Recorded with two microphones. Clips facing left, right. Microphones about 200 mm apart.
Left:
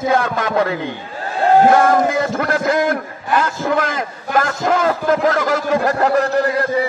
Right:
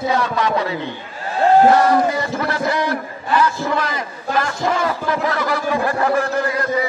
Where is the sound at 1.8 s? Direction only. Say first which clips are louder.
Left 1 dB; 45° left (ahead or behind).